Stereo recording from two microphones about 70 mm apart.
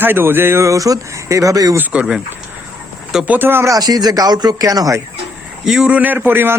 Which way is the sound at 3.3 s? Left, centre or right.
Right.